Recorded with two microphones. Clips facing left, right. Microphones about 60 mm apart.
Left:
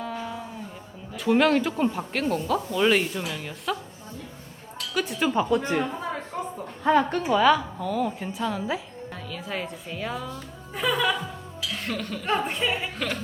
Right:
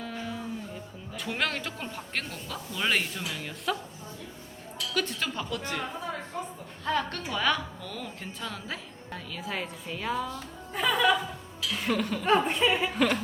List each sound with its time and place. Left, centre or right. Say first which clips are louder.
0.0 s music: left 4 dB; centre
1.1 s speech: left 11 dB; centre
4.9 s a woman's voice: left 5 dB; centre
5.3 s speech: left 10 dB; left
6.8 s a woman's voice: left 9 dB; centre